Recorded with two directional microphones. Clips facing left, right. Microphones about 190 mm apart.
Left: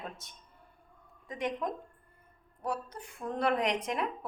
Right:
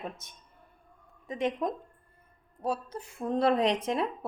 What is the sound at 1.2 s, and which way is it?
Speech, 25° right (ahead or behind).